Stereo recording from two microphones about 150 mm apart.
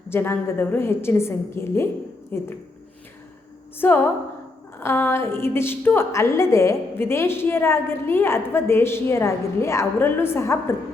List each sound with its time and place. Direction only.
0.1 s a woman's voice: 15° left (ahead or behind)
3.8 s a woman's voice: 15° left (ahead or behind)